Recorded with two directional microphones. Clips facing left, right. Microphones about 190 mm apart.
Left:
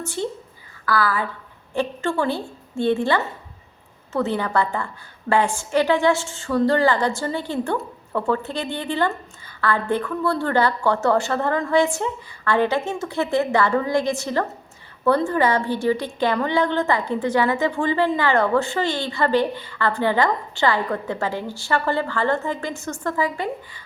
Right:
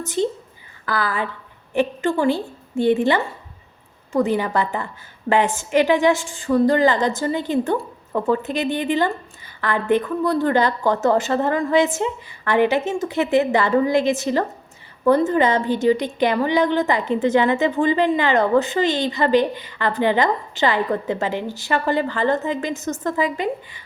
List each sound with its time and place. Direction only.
0.9 s a woman's voice: 20° right (ahead or behind)